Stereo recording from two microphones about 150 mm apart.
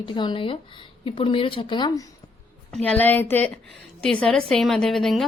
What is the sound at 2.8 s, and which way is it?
A woman's voice, 10° left (ahead or behind).